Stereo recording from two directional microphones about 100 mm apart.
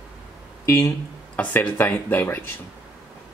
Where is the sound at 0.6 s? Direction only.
35° left (ahead or behind).